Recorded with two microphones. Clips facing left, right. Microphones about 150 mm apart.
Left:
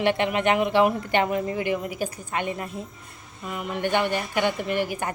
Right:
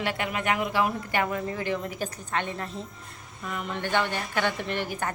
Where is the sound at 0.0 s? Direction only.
25° left (ahead or behind).